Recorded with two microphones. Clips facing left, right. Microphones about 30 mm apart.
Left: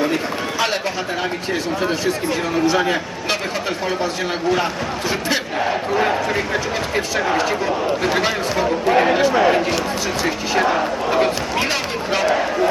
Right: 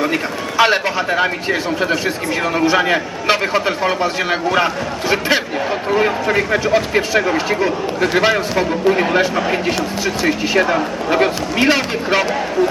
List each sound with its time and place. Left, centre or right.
0.0 s run: centre
0.6 s a man's voice: right
2.3 s a man's voice: right
8.9 s a man's voice: centre
10.2 s speech: centre
11.1 s speech: centre